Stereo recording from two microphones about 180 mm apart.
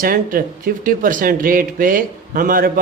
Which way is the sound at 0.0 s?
50° right (ahead or behind).